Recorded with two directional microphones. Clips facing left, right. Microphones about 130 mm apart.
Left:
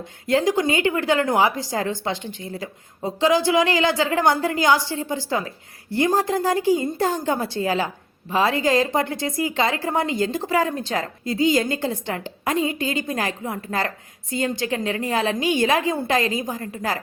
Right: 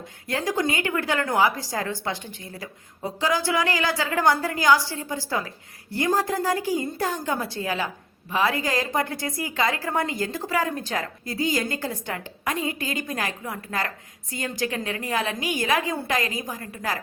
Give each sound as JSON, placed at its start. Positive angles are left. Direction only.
{"t": 0.3, "sound": "a woman's voice", "side_deg": 20}